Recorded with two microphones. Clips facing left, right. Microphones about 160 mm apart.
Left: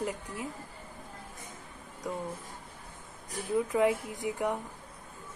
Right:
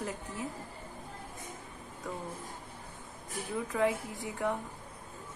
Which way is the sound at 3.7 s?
15° left (ahead or behind).